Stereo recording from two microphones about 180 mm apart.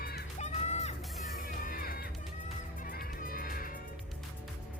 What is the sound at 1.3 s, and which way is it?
Music, 55° left (ahead or behind).